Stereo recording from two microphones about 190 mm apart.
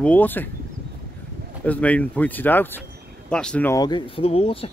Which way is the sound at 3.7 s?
25° left (ahead or behind).